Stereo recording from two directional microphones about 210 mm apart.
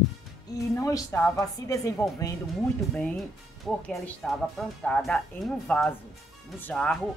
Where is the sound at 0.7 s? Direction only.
15° left (ahead or behind).